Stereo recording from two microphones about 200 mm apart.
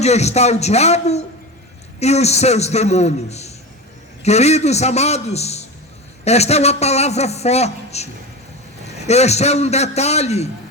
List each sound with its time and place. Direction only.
0.0 s a man's voice: 35° left (ahead or behind)